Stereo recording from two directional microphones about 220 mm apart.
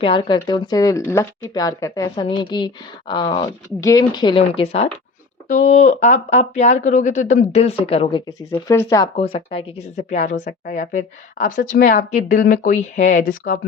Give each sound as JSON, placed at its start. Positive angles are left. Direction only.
{"t": 0.0, "sound": "speech", "side_deg": 25}
{"t": 9.1, "sound": "speech", "side_deg": 25}